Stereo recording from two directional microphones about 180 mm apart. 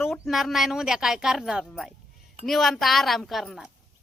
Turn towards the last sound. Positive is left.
turn(degrees=0)  # may be behind; listen again after turning